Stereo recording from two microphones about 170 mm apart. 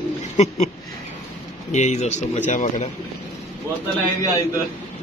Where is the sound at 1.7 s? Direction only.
40° left (ahead or behind).